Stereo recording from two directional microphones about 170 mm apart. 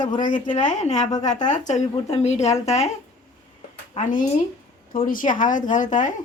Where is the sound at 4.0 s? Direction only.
50° left (ahead or behind).